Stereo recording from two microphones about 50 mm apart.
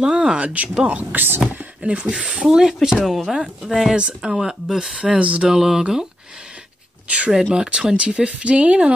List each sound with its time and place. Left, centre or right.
0.0 s speech: centre
3.9 s speech: centre
5.2 s speech: right
5.5 s speech: centre
7.1 s speech: right
7.3 s speech: centre